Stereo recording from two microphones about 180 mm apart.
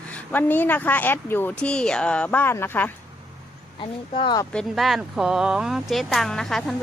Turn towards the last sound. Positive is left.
turn(degrees=0)  # may be behind; listen again after turning